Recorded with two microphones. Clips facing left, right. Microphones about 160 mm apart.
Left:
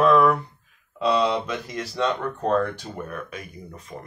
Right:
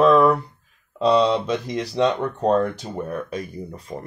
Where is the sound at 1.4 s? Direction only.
30° right (ahead or behind).